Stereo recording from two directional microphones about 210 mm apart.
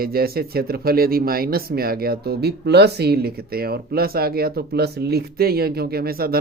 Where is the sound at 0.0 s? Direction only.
45° right (ahead or behind).